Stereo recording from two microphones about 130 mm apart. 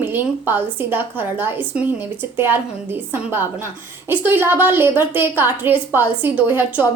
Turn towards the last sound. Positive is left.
turn(degrees=-15)  # may be behind; listen again after turning